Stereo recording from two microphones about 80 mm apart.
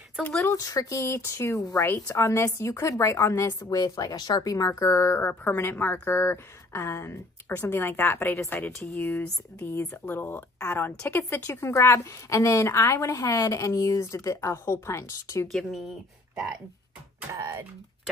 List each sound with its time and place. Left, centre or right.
0.2 s speech: left
0.6 s a woman's voice: left
3.7 s speech: left
5.3 s a woman's voice: left
15.5 s speech: centre